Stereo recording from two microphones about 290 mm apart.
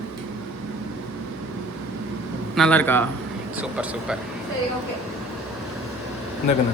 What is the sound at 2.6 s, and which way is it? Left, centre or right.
Speech, centre.